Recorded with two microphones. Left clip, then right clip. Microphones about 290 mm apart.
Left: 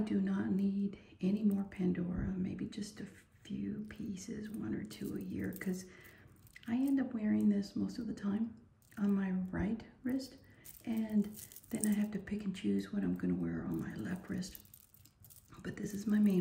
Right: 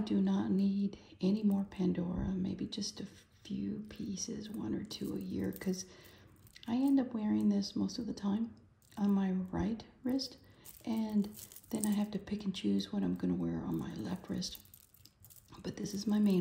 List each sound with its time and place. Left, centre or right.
0.0 s speech: centre
15.5 s speech: centre